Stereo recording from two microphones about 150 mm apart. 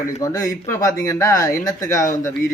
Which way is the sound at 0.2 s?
20° left (ahead or behind).